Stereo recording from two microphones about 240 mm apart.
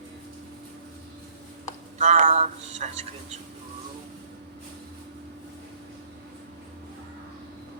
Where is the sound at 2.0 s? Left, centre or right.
Right.